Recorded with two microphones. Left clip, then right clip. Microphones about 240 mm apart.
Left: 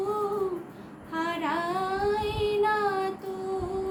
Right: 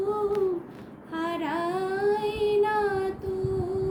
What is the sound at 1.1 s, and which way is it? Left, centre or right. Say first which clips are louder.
Child singing: left 1 dB; centre.